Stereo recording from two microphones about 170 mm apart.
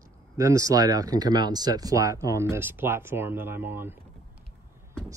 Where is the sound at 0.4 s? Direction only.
20° right (ahead or behind).